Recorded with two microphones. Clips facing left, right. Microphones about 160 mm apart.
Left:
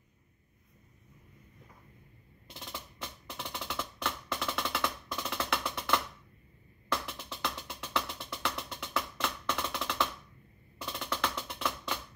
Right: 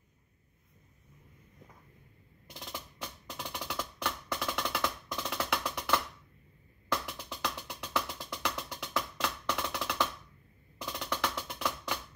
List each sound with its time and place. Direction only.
2.4 s percussion: 15° right (ahead or behind)
6.9 s music: 15° right (ahead or behind)
10.8 s percussion: 15° right (ahead or behind)
11.5 s music: 15° right (ahead or behind)